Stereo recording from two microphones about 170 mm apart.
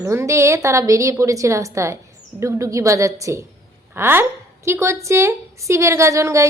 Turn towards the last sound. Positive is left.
turn(degrees=-20)  # may be behind; listen again after turning